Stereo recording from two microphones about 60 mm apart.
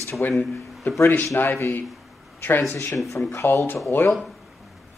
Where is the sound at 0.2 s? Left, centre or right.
Left.